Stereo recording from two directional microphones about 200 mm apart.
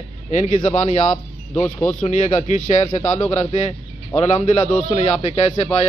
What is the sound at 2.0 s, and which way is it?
A man's voice, 35° left (ahead or behind).